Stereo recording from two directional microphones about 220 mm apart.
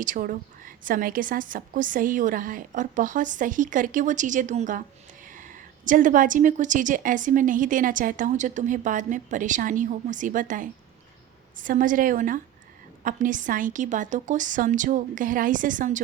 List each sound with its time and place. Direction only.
0.0 s a woman's voice: 35° right (ahead or behind)